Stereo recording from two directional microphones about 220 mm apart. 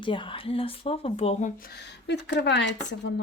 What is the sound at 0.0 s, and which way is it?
Speech, 20° left (ahead or behind).